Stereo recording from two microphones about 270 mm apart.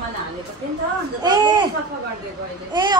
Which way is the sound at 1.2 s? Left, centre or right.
Centre.